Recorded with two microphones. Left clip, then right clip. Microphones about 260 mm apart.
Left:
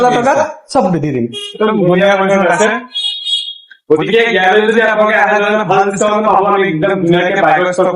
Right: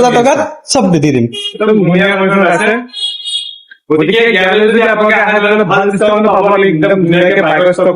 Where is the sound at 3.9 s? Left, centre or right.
Centre.